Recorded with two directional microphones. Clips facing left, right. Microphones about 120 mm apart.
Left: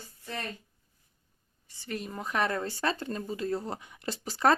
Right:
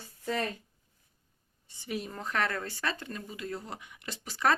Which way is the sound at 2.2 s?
15° left (ahead or behind).